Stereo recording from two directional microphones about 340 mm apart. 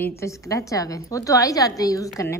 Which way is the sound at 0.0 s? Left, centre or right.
Centre.